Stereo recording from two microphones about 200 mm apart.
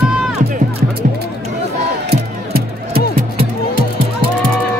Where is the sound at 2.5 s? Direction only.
50° right (ahead or behind).